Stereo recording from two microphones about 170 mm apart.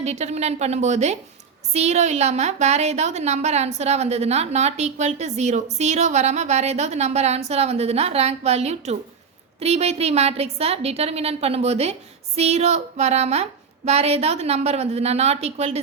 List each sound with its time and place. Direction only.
0.0 s a woman's voice: 40° right (ahead or behind)